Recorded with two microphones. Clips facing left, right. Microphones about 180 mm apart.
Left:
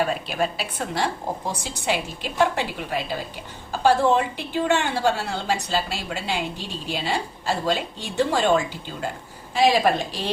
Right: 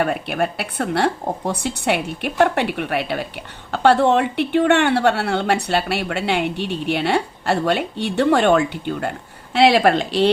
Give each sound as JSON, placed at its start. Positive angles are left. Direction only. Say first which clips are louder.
{"t": 0.0, "sound": "a woman's voice", "louder": "right 3 dB", "side_deg": -60}